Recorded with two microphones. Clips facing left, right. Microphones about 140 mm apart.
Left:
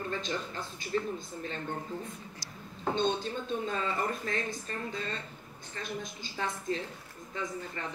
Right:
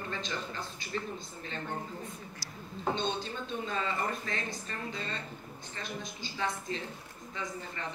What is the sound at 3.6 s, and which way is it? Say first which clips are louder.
Speech: right 1 dB; 45° left (ahead or behind).